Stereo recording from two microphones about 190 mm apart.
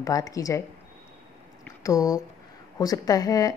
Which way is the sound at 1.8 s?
20° left (ahead or behind).